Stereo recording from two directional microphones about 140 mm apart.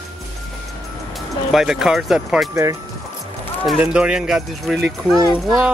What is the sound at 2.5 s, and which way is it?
Speech, 20° right (ahead or behind).